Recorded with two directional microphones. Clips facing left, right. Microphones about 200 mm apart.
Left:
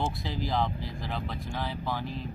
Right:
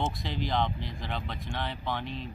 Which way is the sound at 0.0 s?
5° left (ahead or behind).